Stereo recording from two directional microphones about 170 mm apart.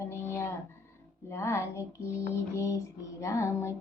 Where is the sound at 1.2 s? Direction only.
15° left (ahead or behind).